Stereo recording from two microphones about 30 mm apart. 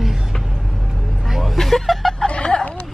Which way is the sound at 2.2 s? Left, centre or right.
Left.